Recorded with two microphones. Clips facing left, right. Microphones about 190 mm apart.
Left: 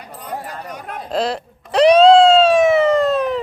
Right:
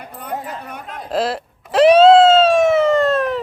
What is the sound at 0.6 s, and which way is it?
Chatter, 55° right (ahead or behind).